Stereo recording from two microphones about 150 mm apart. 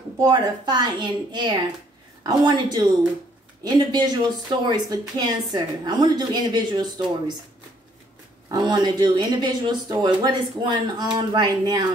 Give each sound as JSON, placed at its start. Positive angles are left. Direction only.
{"t": 0.2, "sound": "a woman's voice", "side_deg": -25}
{"t": 8.5, "sound": "speech", "side_deg": -25}